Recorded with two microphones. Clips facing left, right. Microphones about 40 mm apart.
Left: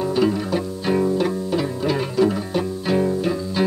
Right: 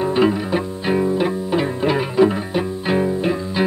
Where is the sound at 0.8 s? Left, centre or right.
Right.